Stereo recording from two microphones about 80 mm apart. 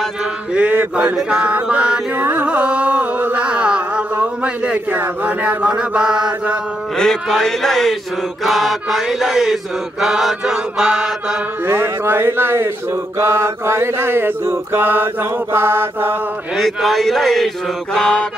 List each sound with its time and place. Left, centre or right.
0.6 s chant: centre
2.1 s mantra: right
2.4 s music: centre
4.9 s chant: right
7.0 s mantra: centre
11.6 s mantra: right
16.5 s mantra: centre